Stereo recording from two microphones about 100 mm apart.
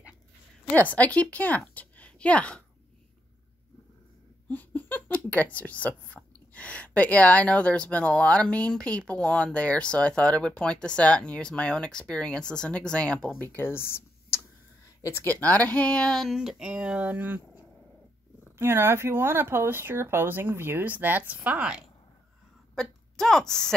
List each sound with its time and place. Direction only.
0.7 s speech: 15° left (ahead or behind)
1.7 s a sound: 15° left (ahead or behind)
4.5 s speech: 20° left (ahead or behind)
16.3 s speech: 5° right (ahead or behind)
22.8 s a woman's voice: 5° left (ahead or behind)